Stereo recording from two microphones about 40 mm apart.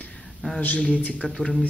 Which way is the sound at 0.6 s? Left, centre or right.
Left.